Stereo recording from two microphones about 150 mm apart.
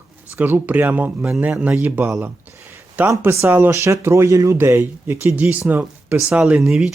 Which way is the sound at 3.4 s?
15° right (ahead or behind).